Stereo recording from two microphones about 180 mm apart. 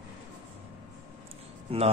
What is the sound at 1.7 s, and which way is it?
Mantra, 30° right (ahead or behind).